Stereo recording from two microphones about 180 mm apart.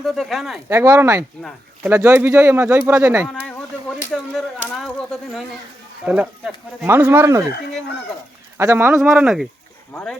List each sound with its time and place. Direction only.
0.0 s speech: centre (ahead or behind)
0.7 s speech: 15° right (ahead or behind)
3.2 s a sound: 5° left (ahead or behind)
4.1 s speech: centre (ahead or behind); by 7.4 s 15° right (ahead or behind)
8.5 s speech: 15° right (ahead or behind)
9.0 s speech: 5° right (ahead or behind)